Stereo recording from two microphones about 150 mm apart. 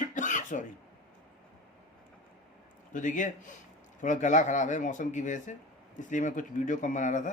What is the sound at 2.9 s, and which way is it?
Speech, 60° left (ahead or behind).